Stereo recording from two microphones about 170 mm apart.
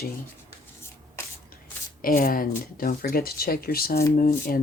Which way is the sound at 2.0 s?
60° left (ahead or behind).